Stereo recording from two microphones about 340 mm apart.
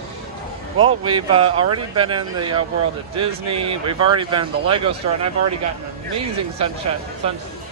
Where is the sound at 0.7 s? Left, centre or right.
Centre.